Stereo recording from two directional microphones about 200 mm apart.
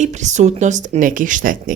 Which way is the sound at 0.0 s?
35° right (ahead or behind).